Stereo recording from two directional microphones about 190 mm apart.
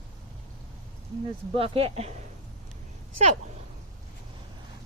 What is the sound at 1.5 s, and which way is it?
Speech, 30° right (ahead or behind).